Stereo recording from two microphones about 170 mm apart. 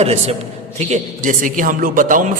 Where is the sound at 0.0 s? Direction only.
40° right (ahead or behind).